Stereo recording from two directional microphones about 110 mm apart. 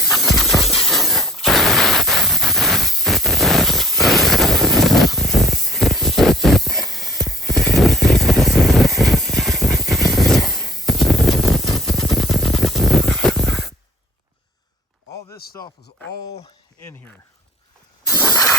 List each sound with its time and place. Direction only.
0.1 s a sound: centre (ahead or behind)
15.6 s speech: 25° left (ahead or behind)
18.1 s mechanisms: 30° left (ahead or behind)